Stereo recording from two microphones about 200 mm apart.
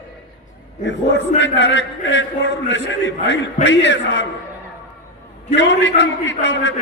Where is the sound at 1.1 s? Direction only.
65° left (ahead or behind).